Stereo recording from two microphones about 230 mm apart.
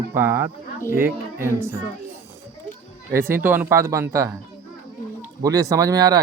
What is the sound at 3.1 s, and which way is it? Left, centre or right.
Speech, centre.